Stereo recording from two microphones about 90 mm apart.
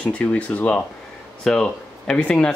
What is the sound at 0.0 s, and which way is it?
Speech, 15° left (ahead or behind).